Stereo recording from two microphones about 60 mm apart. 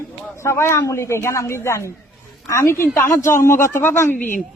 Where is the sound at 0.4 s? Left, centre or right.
Left.